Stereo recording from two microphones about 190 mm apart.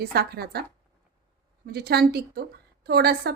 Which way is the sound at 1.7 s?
55° right (ahead or behind).